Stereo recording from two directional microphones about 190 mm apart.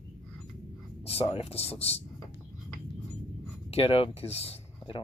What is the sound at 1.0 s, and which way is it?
Speech, 30° left (ahead or behind).